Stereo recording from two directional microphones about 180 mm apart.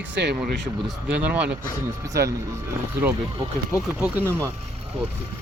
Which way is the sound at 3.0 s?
10° right (ahead or behind).